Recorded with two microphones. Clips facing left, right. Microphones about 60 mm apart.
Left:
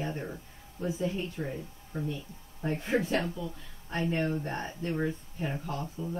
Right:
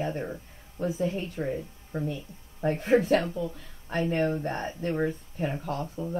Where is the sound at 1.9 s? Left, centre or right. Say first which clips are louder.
Right 3 dB; right.